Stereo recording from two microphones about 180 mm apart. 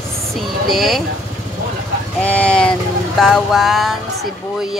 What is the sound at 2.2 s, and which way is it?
Speech, 5° left (ahead or behind).